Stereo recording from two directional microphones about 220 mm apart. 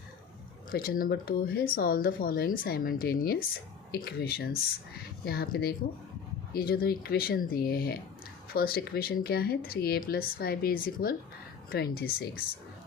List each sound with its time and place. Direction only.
0.7 s speech: 40° left (ahead or behind)